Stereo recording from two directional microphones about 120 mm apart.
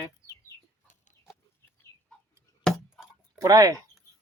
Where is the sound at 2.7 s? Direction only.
5° left (ahead or behind).